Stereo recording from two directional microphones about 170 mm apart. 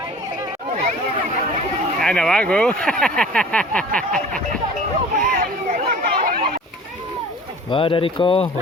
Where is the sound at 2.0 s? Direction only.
5° left (ahead or behind).